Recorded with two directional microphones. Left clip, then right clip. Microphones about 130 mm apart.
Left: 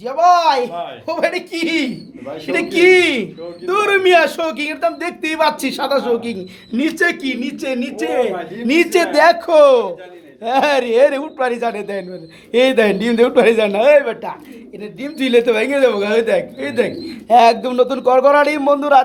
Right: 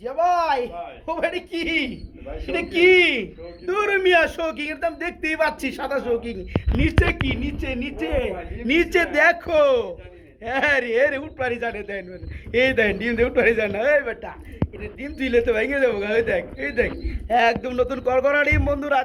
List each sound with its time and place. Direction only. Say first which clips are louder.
0.0 s speech: left 8 dB; 10° right (ahead or behind)
2.7 s speech: left 4 dB; centre (ahead or behind)
7.1 s speech: left 4 dB; 25° right (ahead or behind)
8.6 s speech: left 5 dB; centre (ahead or behind)
17.2 s speech: left 9 dB; 15° left (ahead or behind)